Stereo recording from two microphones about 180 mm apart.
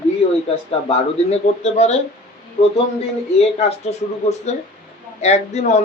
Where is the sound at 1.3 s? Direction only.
35° left (ahead or behind).